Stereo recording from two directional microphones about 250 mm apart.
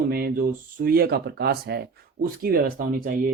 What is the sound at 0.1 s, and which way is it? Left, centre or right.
Speech, right.